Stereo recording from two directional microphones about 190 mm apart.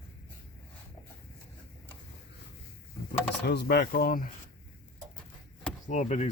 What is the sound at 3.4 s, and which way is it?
Speech, 60° left (ahead or behind).